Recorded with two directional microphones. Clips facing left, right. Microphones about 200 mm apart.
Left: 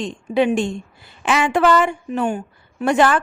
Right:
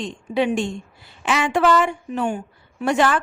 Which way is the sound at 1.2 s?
50° left (ahead or behind).